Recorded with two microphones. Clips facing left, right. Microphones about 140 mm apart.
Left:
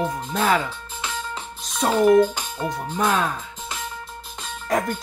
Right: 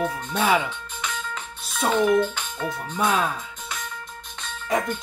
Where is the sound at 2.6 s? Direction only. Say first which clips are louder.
Left 3 dB; 25° left (ahead or behind).